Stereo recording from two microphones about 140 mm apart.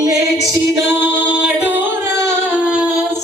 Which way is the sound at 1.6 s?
10° right (ahead or behind).